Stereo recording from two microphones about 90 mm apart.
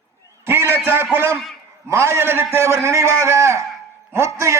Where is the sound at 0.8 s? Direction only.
25° right (ahead or behind).